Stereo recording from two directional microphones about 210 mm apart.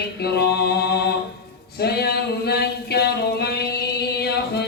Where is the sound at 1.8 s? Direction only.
50° left (ahead or behind).